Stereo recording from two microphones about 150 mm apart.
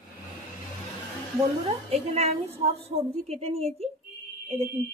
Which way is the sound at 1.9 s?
45° right (ahead or behind).